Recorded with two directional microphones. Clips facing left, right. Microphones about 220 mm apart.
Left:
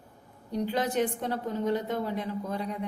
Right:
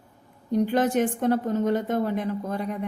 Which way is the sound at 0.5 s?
50° right (ahead or behind).